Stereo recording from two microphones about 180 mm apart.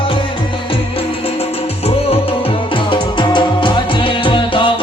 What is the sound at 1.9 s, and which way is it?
Music, 35° left (ahead or behind).